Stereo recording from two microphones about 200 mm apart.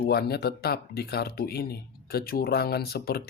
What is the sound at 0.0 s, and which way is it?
Speech, 55° left (ahead or behind).